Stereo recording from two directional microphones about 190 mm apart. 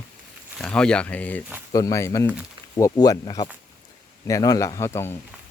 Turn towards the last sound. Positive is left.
turn(degrees=15)  # may be behind; listen again after turning